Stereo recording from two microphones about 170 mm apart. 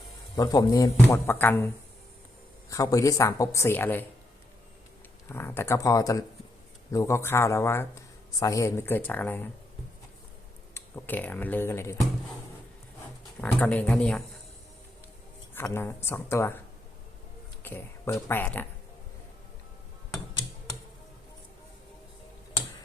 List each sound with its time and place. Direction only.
0.3 s speech: 20° left (ahead or behind)
5.3 s speech: 15° left (ahead or behind)
10.8 s speech: 10° left (ahead or behind)
13.4 s speech: 5° left (ahead or behind)
15.5 s speech: 15° left (ahead or behind)
17.6 s speech: 15° left (ahead or behind)